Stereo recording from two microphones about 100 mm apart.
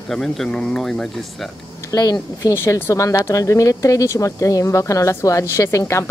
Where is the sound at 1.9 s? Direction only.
40° left (ahead or behind).